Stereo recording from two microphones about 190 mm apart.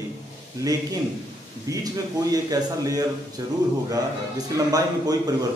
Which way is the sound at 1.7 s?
20° right (ahead or behind).